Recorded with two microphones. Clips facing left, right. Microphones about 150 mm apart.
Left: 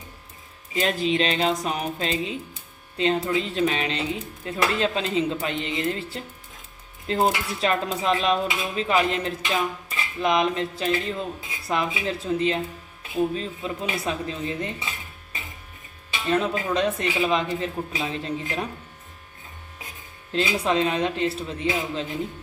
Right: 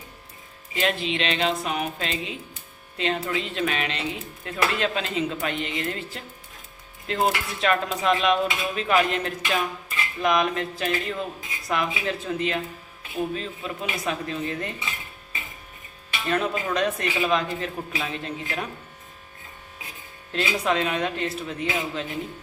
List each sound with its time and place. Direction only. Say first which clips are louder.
0.7 s dishes: left 2 dB; 35° left (ahead or behind)
4.4 s speech: left 1 dB; 30° left (ahead or behind)
7.1 s dishes: left 2 dB; 30° left (ahead or behind)
10.2 s speech: left 1 dB; 25° left (ahead or behind)
16.2 s speech: left 2 dB; 25° left (ahead or behind)
20.3 s speech: left 2 dB; 30° left (ahead or behind)